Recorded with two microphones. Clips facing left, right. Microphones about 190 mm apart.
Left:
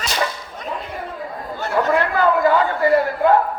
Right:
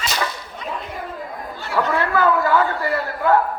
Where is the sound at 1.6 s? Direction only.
45° left (ahead or behind).